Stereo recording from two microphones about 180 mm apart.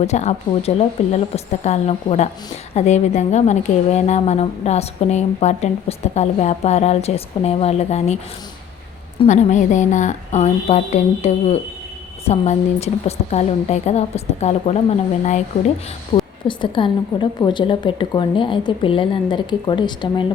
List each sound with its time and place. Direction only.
0.0 s a woman's voice: 40° left (ahead or behind)
9.2 s a woman's voice: 40° left (ahead or behind)
16.1 s a sound: 25° left (ahead or behind)
16.5 s a woman's voice: 25° left (ahead or behind)